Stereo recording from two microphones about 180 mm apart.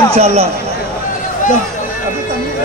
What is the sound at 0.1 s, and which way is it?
Speech, 35° right (ahead or behind).